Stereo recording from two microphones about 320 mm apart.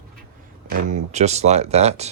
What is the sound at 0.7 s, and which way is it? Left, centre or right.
Speech, right.